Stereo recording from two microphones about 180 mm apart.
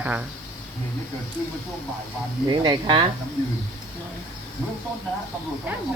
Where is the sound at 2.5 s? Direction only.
25° right (ahead or behind).